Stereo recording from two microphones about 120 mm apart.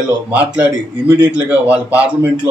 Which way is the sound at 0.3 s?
15° right (ahead or behind).